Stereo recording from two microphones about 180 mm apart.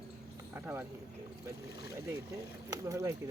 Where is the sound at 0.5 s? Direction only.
15° right (ahead or behind).